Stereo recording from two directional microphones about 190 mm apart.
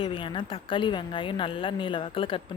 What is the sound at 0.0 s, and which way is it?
A woman's voice, 25° left (ahead or behind).